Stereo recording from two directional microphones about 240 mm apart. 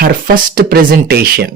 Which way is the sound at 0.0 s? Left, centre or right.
Right.